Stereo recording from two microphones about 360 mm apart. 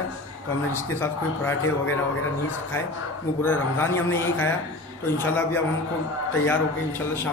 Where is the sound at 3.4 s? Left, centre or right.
Centre.